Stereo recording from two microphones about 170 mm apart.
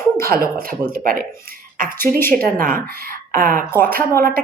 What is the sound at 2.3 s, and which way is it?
A woman's voice, 55° right (ahead or behind).